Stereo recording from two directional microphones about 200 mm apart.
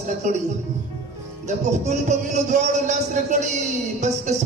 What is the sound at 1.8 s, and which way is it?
Speech, 35° right (ahead or behind).